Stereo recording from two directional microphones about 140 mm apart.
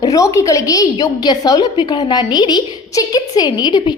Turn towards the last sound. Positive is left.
turn(degrees=30)  # may be behind; listen again after turning